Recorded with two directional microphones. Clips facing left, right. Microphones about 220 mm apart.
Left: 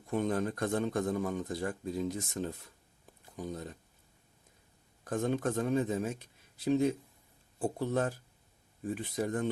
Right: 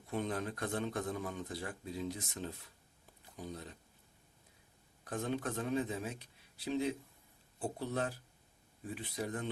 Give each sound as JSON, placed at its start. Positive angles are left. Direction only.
{"t": 0.1, "sound": "a man's voice", "side_deg": 45}
{"t": 5.0, "sound": "a man's voice", "side_deg": 45}